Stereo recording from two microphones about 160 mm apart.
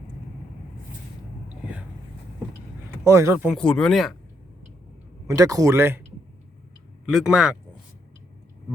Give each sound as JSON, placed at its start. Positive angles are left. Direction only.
{"t": 3.0, "sound": "speech", "side_deg": -20}
{"t": 3.6, "sound": "speech", "side_deg": 5}
{"t": 5.3, "sound": "speech", "side_deg": -20}
{"t": 7.0, "sound": "speech", "side_deg": -5}